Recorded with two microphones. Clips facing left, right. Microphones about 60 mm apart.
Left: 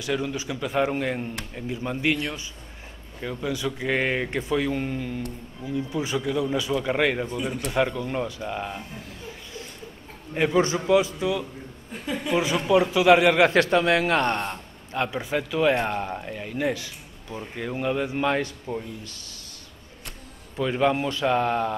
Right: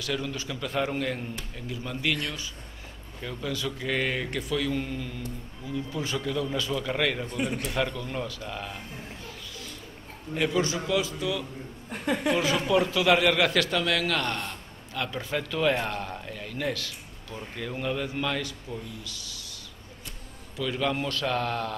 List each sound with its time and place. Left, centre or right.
0.0 s speech: centre
10.3 s speech: left
11.9 s a woman's voice: right
12.7 s a man's voice: left
14.5 s a sound: left
15.0 s speech: centre
18.3 s a man's voice: left
20.5 s speech: left
20.9 s speech: centre